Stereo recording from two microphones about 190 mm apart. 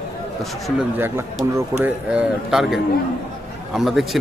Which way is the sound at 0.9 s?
10° right (ahead or behind).